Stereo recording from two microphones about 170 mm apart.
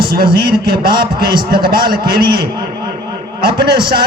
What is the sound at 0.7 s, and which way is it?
A man's voice, 60° right (ahead or behind).